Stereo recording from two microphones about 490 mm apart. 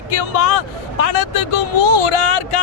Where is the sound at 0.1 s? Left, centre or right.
Left.